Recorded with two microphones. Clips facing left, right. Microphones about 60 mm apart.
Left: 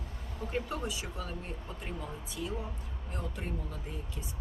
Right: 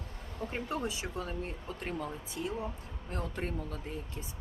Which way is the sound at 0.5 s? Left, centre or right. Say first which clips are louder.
Left 1 dB; right.